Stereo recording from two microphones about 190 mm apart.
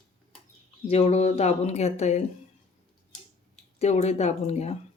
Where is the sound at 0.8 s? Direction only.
35° left (ahead or behind).